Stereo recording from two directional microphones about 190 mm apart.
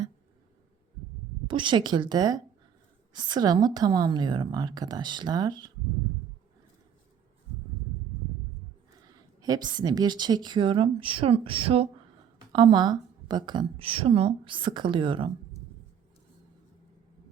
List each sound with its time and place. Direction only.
1.5 s speech: 25° right (ahead or behind)
9.4 s speech: 20° right (ahead or behind)